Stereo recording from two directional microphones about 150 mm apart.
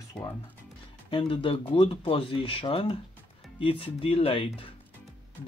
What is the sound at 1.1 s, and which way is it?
Speech, 35° left (ahead or behind).